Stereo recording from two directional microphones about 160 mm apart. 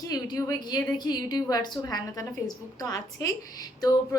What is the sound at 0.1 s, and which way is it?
A woman's voice, 20° left (ahead or behind).